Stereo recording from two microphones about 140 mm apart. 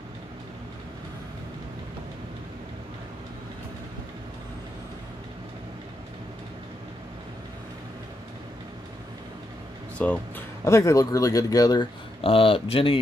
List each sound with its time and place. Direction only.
9.9 s speech: 10° left (ahead or behind)
10.6 s speech: 20° left (ahead or behind); by 13.0 s 40° left (ahead or behind)